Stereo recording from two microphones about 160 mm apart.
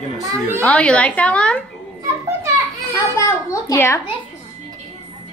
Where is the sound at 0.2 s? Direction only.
15° right (ahead or behind).